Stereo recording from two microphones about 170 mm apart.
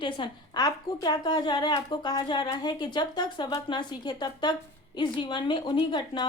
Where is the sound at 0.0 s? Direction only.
25° left (ahead or behind).